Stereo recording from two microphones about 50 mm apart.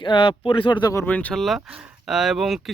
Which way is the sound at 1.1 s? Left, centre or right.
Left.